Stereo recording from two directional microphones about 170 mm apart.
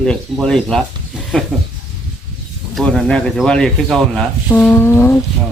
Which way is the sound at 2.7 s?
Centre (ahead or behind).